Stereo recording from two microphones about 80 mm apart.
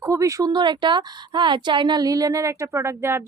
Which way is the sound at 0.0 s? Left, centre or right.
Right.